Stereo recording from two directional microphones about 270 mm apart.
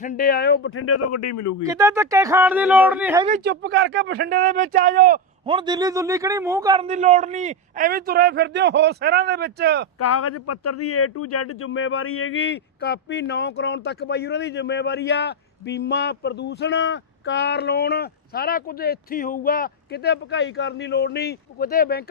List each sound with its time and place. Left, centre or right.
0.0 s speech: left
1.1 s a man's voice: left
1.6 s speech: centre
3.2 s speech: right
5.5 s a man's voice: centre; by 9.9 s right
10.0 s speech: left